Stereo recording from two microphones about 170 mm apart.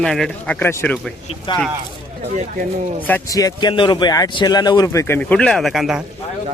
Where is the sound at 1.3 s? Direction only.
30° left (ahead or behind).